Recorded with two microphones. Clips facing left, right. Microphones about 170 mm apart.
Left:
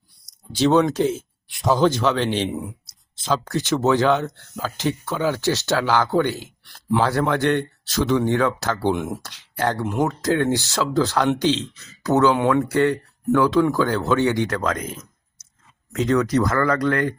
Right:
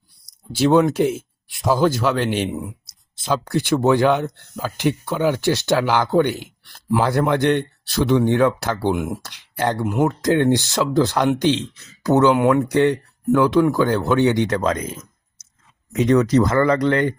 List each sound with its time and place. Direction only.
0.5 s speech: 10° right (ahead or behind)
15.9 s speech: 20° right (ahead or behind)